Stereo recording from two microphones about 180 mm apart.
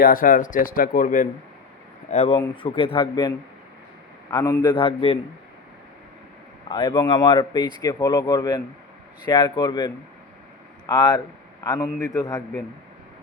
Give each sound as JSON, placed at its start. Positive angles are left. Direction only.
{"t": 0.0, "sound": "speech", "side_deg": 50}
{"t": 2.0, "sound": "speech", "side_deg": 35}
{"t": 6.7, "sound": "speech", "side_deg": 25}